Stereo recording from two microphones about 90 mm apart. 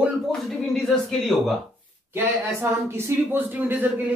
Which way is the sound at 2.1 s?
30° right (ahead or behind).